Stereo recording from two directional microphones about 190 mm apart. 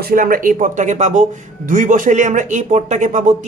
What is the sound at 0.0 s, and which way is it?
A man's voice, 50° right (ahead or behind).